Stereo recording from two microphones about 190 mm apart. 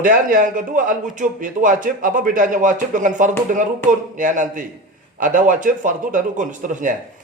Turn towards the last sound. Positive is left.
turn(degrees=-40)  # may be behind; listen again after turning